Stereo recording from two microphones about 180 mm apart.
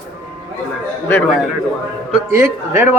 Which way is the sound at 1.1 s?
10° left (ahead or behind).